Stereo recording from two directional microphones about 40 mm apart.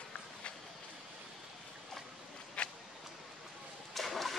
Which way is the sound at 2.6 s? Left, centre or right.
Left.